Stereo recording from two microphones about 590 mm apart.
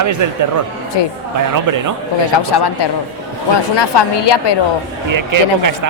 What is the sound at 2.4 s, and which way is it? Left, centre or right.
Speech, left.